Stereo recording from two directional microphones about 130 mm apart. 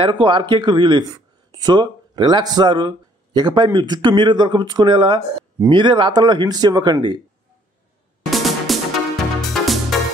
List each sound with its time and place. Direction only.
0.0 s speech: 40° right (ahead or behind)
8.3 s music: centre (ahead or behind)